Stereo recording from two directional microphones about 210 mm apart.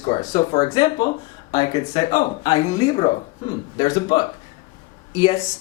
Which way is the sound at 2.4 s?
25° left (ahead or behind).